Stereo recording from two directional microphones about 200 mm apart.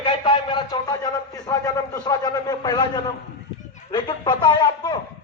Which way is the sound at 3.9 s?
20° left (ahead or behind).